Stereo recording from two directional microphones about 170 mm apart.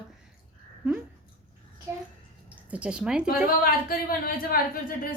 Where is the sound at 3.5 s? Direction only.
60° left (ahead or behind).